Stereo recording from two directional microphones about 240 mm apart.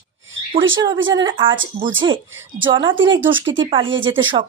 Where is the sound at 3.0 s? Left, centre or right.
Right.